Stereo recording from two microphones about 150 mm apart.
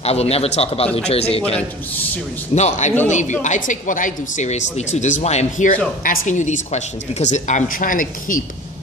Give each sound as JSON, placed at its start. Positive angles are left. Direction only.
{"t": 0.0, "sound": "speech", "side_deg": 45}
{"t": 2.5, "sound": "a woman's voice", "side_deg": 50}